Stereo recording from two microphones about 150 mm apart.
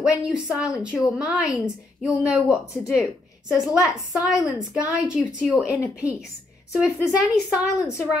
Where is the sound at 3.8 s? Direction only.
20° left (ahead or behind).